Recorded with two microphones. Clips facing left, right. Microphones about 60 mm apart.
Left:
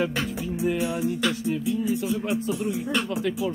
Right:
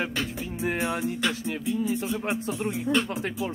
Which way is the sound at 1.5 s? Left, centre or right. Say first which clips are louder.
Left 2 dB; right.